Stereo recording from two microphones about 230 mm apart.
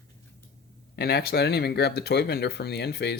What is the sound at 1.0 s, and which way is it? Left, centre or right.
Speech, left.